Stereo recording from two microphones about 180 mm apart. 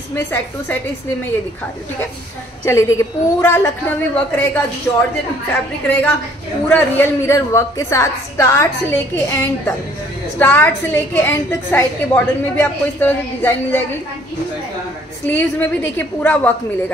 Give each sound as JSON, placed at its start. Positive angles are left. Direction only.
{"t": 0.1, "sound": "a woman's voice", "side_deg": 10}
{"t": 2.6, "sound": "a woman's voice", "side_deg": 15}
{"t": 5.9, "sound": "a woman's voice", "side_deg": 10}
{"t": 15.2, "sound": "a woman's voice", "side_deg": 10}